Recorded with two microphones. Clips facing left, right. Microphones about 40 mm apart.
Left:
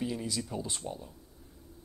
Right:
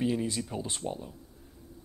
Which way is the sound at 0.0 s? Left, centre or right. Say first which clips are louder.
Right 5 dB; right.